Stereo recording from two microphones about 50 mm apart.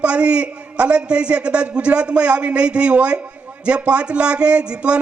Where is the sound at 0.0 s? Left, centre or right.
Right.